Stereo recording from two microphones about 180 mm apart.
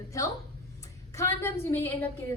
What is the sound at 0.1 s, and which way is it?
A woman's voice, 20° left (ahead or behind).